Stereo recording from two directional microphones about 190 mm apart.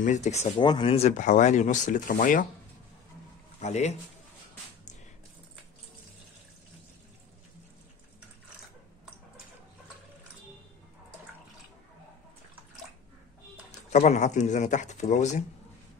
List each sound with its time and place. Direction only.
0.0 s speech: 40° left (ahead or behind)
3.6 s speech: 35° left (ahead or behind)
13.7 s speech: 40° left (ahead or behind)